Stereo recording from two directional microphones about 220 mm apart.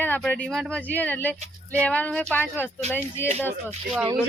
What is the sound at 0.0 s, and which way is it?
Speech, 5° left (ahead or behind).